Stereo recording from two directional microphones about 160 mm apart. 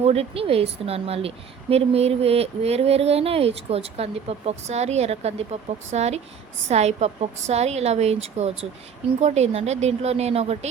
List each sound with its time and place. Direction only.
0.0 s a woman's voice: 40° right (ahead or behind)